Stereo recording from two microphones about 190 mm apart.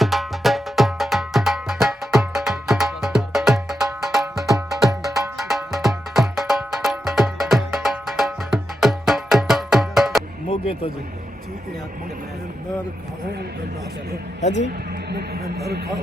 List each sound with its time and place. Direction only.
0.0 s music: centre (ahead or behind)
14.4 s a man's voice: 35° left (ahead or behind)
15.1 s speech: 55° right (ahead or behind)